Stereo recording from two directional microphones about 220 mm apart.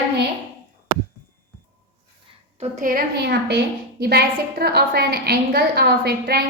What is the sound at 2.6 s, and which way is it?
A woman's voice, 35° right (ahead or behind).